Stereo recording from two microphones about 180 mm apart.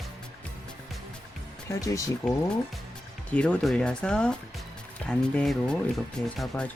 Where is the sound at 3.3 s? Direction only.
5° left (ahead or behind).